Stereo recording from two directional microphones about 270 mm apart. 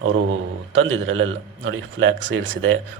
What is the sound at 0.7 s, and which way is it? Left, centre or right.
Speech, right.